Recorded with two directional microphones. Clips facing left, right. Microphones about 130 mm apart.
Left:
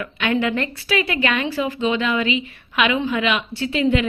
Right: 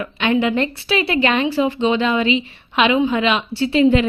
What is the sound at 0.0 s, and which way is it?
A woman's voice, 25° right (ahead or behind).